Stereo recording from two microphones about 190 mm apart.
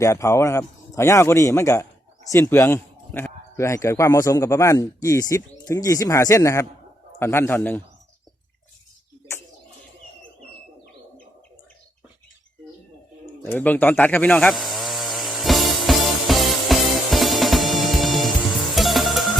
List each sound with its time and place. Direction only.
0.0 s a man's voice: 15° left (ahead or behind)
13.4 s chainsaw: 10° left (ahead or behind)